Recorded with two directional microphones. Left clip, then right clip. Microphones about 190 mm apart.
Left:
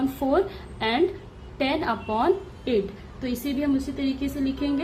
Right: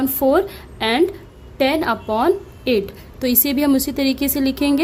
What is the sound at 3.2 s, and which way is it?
A woman's voice, 50° right (ahead or behind).